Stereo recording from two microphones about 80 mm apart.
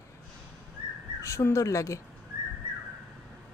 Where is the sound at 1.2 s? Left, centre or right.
Left.